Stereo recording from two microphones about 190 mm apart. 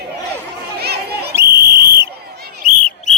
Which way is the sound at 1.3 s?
15° right (ahead or behind).